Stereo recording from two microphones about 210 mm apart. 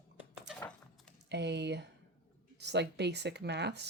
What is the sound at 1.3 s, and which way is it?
Typing, 55° right (ahead or behind).